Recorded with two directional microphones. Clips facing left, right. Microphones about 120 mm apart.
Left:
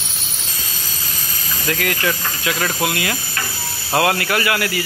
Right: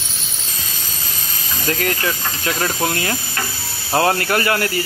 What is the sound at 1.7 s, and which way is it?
Speech, 35° right (ahead or behind).